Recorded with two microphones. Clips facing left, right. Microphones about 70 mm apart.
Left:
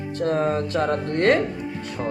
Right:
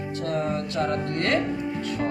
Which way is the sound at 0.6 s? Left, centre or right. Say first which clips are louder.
Left 3 dB; left.